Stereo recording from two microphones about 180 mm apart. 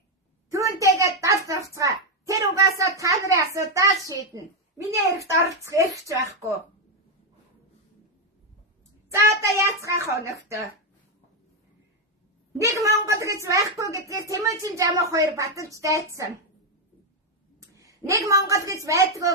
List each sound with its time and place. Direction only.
0.5 s a sound: 15° right (ahead or behind)
0.9 s a woman's voice: 15° right (ahead or behind)
4.0 s a woman's voice: 15° left (ahead or behind)
5.3 s a woman's voice: 15° right (ahead or behind)
9.0 s a woman's voice: 15° right (ahead or behind)
12.5 s a woman's voice: 15° right (ahead or behind)
17.7 s a sound: 15° right (ahead or behind)
18.3 s a woman's voice: 15° right (ahead or behind)